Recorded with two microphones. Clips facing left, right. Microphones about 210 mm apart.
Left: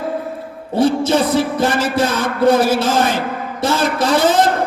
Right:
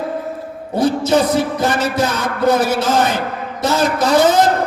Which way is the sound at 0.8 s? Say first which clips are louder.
Even; 30° left (ahead or behind).